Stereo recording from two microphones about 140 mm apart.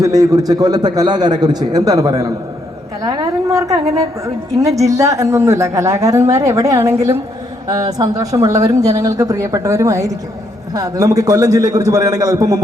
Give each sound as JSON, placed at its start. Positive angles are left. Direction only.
{"t": 0.0, "sound": "a woman's voice", "side_deg": -25}